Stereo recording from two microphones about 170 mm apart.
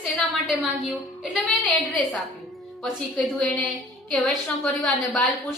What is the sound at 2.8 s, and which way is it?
Speech, centre (ahead or behind).